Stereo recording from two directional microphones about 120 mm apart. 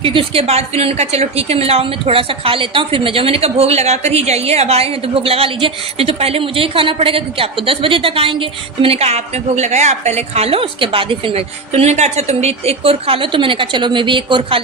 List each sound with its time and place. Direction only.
0.0 s a woman's voice: 45° right (ahead or behind)